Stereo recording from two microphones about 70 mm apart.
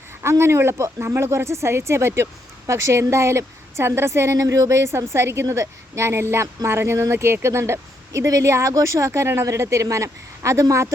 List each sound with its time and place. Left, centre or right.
0.2 s a woman's voice: right